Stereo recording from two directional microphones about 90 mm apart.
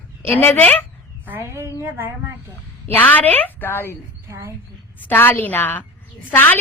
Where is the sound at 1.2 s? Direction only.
25° right (ahead or behind).